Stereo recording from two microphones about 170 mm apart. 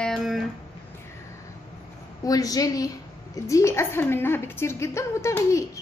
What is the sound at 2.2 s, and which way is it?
A woman's voice, 20° left (ahead or behind).